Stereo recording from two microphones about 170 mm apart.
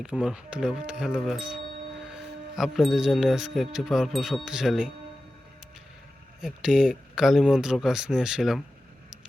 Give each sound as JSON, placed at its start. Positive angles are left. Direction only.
{"t": 0.0, "sound": "wind chime", "side_deg": -5}
{"t": 2.6, "sound": "wind chime", "side_deg": 0}
{"t": 6.4, "sound": "wind chime", "side_deg": -5}